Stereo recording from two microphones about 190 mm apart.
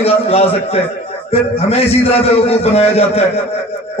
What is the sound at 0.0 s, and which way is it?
A man's voice, 30° left (ahead or behind).